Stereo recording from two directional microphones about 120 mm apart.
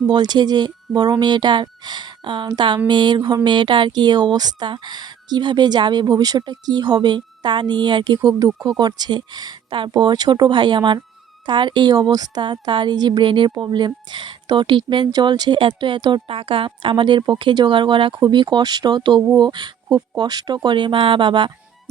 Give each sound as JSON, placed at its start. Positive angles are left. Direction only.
{"t": 0.1, "sound": "speech", "side_deg": -35}